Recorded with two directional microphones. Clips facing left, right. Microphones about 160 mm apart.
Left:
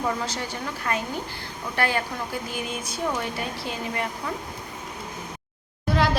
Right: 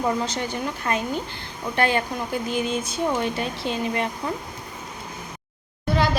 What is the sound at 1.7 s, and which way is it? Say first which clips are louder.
Speech: right 3 dB; 20° right (ahead or behind).